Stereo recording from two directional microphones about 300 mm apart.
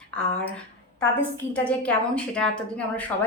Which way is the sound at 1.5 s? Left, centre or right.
Centre.